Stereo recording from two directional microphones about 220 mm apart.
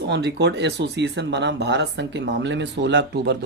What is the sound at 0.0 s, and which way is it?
Speech, 50° right (ahead or behind).